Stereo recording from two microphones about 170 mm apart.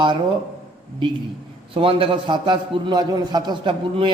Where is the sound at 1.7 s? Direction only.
30° right (ahead or behind).